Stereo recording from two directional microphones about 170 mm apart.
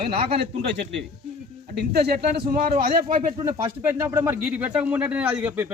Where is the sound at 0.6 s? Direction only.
80° right.